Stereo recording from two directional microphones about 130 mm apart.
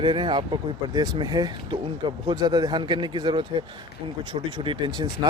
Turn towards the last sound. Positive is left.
turn(degrees=-35)  # may be behind; listen again after turning